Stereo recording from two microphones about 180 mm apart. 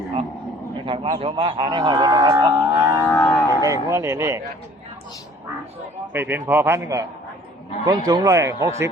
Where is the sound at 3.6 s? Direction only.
15° right (ahead or behind).